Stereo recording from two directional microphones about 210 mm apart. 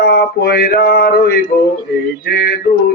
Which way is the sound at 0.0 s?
45° left (ahead or behind).